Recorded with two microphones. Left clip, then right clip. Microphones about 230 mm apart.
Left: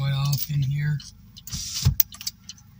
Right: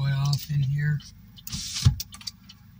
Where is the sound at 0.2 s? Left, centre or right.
Centre.